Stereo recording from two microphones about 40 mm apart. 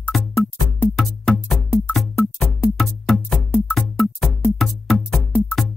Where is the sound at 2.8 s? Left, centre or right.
Centre.